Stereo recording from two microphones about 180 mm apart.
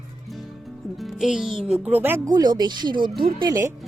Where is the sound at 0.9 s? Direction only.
Centre (ahead or behind); by 3.7 s 15° right (ahead or behind).